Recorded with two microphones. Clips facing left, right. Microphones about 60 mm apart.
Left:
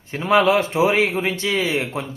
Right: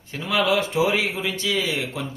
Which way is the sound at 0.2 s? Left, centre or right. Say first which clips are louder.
Left 5 dB; left.